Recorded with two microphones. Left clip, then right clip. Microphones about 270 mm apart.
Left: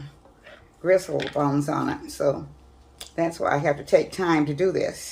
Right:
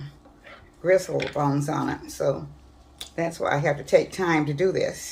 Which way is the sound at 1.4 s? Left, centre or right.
Left.